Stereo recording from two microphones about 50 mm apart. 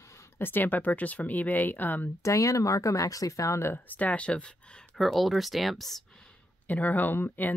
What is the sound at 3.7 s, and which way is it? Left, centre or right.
Speech, left.